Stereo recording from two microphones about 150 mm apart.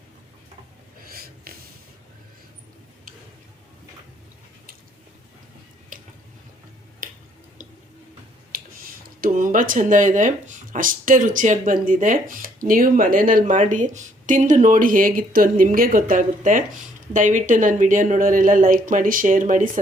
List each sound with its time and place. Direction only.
1.1 s snort: 80° right
7.0 s a sound: 65° right (ahead or behind)
8.5 s speech: 70° right (ahead or behind)